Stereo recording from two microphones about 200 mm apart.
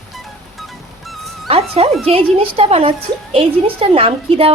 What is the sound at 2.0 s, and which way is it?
A woman's voice, 30° right (ahead or behind).